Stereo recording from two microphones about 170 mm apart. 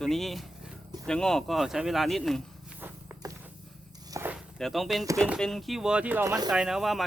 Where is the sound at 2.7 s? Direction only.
10° right (ahead or behind).